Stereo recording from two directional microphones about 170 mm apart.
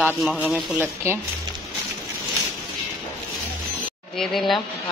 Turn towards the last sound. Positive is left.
turn(degrees=0)  # may be behind; listen again after turning